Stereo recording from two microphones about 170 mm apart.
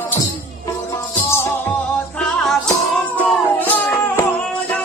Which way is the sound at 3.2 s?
10° left (ahead or behind).